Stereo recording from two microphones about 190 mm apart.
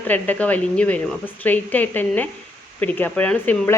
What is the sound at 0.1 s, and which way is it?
Speech, 10° left (ahead or behind).